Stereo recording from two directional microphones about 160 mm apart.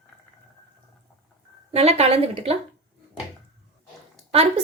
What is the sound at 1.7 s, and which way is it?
Speech, 40° right (ahead or behind).